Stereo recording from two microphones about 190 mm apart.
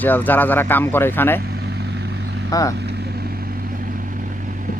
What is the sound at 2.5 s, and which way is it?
Speech, 20° left (ahead or behind).